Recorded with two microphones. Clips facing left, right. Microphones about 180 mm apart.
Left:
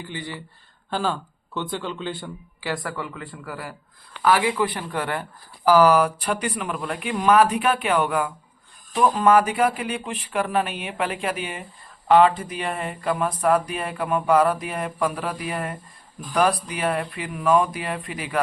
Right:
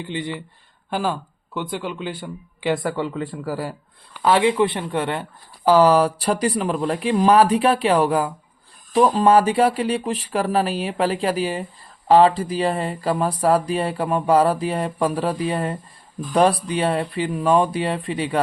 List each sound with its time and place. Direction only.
0.0 s speech: 20° right (ahead or behind)
2.6 s speech: 20° right (ahead or behind)